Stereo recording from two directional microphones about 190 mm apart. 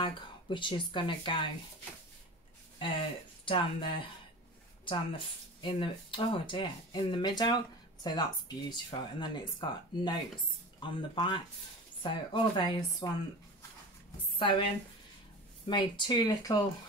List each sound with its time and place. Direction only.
0.0 s speech: 25° left (ahead or behind)
2.8 s speech: 25° left (ahead or behind)
15.6 s speech: 25° left (ahead or behind)